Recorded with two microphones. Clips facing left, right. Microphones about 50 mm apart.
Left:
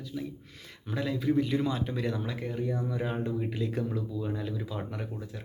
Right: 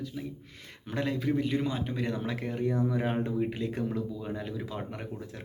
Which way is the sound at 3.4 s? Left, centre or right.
Right.